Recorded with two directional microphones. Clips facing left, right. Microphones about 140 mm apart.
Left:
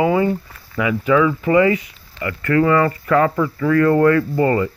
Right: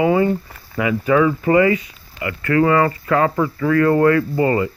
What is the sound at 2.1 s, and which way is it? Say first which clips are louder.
Speech: even; 20° right (ahead or behind).